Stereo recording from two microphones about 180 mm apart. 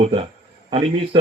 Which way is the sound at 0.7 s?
30° right (ahead or behind).